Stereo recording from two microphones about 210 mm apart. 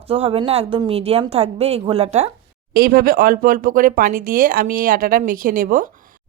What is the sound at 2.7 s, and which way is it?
Speech, 45° right (ahead or behind).